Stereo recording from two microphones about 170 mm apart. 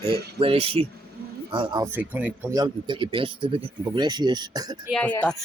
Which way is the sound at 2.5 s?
25° right (ahead or behind).